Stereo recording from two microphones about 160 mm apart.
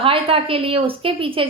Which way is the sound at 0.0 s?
35° right (ahead or behind).